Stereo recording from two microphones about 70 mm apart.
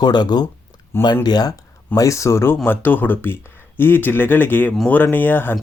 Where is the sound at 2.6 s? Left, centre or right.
Left.